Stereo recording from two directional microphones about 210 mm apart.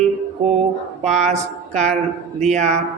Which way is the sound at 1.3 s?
35° right (ahead or behind).